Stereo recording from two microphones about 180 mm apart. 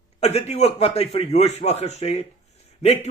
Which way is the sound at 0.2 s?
35° left (ahead or behind).